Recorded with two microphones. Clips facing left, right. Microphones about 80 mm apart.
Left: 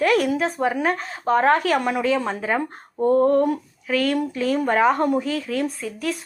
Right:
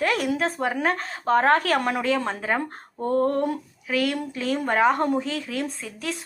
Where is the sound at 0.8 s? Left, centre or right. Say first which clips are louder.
Left 2 dB; right.